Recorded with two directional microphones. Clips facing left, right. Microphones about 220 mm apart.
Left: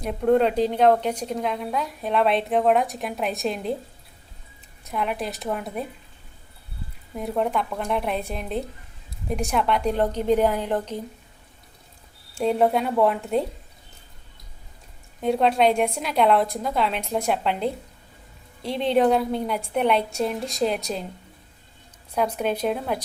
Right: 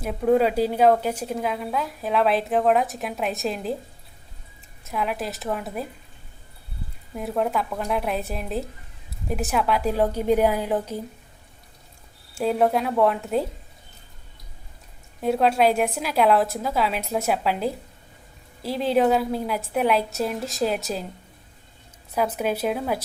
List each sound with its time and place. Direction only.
0.0 s speech: 5° right (ahead or behind)
4.9 s speech: centre (ahead or behind)
7.2 s a woman's voice: centre (ahead or behind)
12.3 s speech: 5° right (ahead or behind)
15.2 s speech: centre (ahead or behind)
22.1 s speech: 5° right (ahead or behind)